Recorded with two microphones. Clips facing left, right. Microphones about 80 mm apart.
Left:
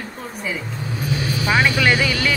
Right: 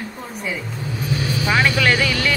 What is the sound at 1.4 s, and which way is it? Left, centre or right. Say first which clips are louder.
Speech: even; centre.